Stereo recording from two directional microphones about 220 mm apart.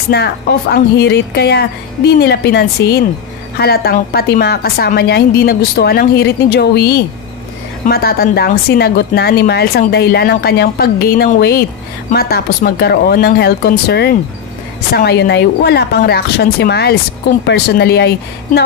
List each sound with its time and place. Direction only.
0.1 s speech: 50° left (ahead or behind)